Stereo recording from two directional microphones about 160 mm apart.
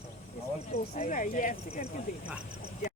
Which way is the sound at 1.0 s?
50° left (ahead or behind).